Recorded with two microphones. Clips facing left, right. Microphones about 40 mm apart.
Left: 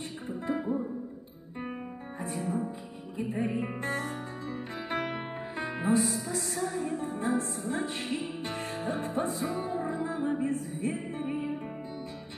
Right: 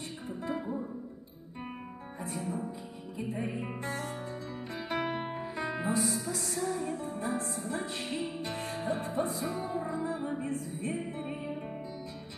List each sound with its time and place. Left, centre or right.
0.5 s music: left
3.2 s music: left
6.5 s music: centre
6.9 s music: left